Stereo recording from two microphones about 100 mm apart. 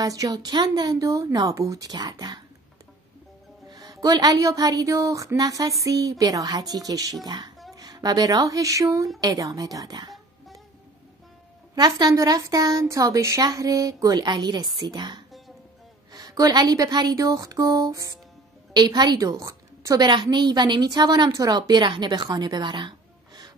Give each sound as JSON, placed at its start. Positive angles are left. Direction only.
{"t": 0.0, "sound": "speech", "side_deg": -35}
{"t": 3.6, "sound": "speech", "side_deg": -40}
{"t": 10.1, "sound": "music", "side_deg": 0}
{"t": 11.7, "sound": "speech", "side_deg": -40}
{"t": 18.7, "sound": "a woman's voice", "side_deg": -45}
{"t": 20.1, "sound": "a woman's voice", "side_deg": -50}